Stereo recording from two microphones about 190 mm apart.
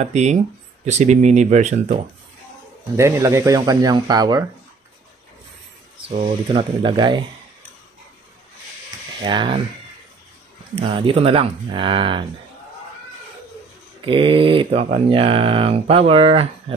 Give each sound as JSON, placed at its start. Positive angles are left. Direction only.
{"t": 0.0, "sound": "speech", "side_deg": -35}
{"t": 3.0, "sound": "speech", "side_deg": -15}
{"t": 6.0, "sound": "speech", "side_deg": -25}
{"t": 9.2, "sound": "speech", "side_deg": -25}
{"t": 10.7, "sound": "speech", "side_deg": -30}
{"t": 14.0, "sound": "speech", "side_deg": -25}